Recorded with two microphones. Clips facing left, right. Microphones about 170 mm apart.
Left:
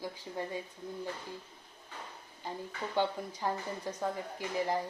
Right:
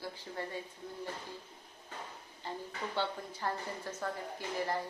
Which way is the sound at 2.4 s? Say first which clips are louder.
Left 1 dB; 15° left (ahead or behind).